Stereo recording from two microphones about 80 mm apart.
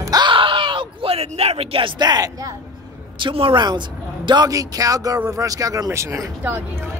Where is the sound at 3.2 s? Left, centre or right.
Right.